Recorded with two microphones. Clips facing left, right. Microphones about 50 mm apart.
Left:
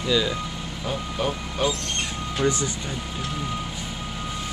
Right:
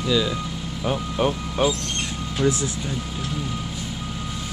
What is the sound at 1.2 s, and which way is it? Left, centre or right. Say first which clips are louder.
Speech: right 4 dB; right.